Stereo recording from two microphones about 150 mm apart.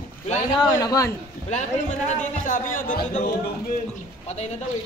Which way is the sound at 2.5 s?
60° left (ahead or behind).